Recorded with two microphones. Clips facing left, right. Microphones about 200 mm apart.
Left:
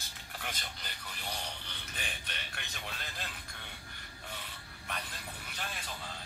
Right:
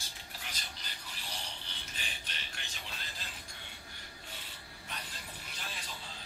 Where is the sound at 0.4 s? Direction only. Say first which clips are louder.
Left 6 dB; 55° left (ahead or behind).